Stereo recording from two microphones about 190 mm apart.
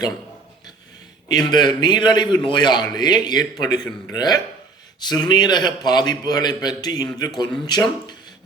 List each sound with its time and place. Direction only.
1.3 s a man's voice: 20° left (ahead or behind)